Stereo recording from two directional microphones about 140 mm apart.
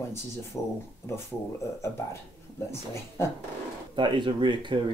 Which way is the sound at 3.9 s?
35° right (ahead or behind).